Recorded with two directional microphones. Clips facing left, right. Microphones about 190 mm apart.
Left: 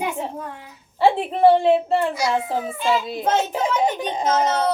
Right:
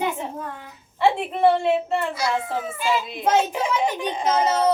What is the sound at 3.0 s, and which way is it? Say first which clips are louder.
A woman's voice: right 1 dB; 35° left (ahead or behind).